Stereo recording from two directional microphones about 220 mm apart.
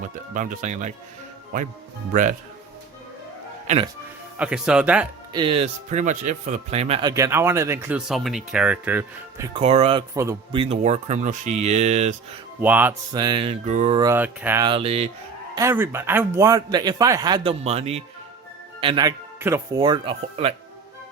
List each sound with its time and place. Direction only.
0.0 s speech: 35° right (ahead or behind)
4.4 s speech: 5° right (ahead or behind)
5.3 s speech: 25° right (ahead or behind)
7.1 s a man's voice: 10° right (ahead or behind)
9.6 s speech: 25° right (ahead or behind)
12.5 s a man's voice: 10° right (ahead or behind)
13.1 s speech: 20° right (ahead or behind)
14.0 s a man's voice: 10° right (ahead or behind); by 15.1 s 25° right (ahead or behind)
15.5 s a man's voice: 10° right (ahead or behind)